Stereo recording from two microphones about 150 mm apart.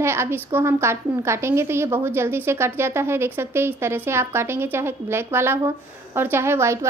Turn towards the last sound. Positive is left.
turn(degrees=-20)  # may be behind; listen again after turning